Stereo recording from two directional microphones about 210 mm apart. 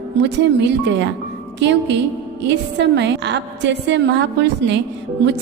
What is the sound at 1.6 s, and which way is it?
A woman's voice, 55° right (ahead or behind).